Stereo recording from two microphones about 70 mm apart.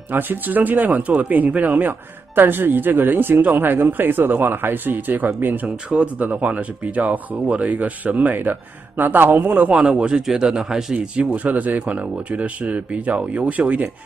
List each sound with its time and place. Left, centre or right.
0.1 s speech: right
9.7 s a man's voice: centre
11.3 s speech: right